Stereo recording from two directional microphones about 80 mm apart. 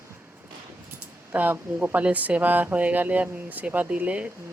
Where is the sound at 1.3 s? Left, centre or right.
Right.